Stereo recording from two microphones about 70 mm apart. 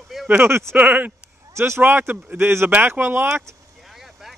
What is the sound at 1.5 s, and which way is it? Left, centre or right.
Speech, right.